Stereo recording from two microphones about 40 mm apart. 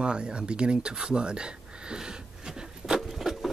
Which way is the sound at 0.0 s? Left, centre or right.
Right.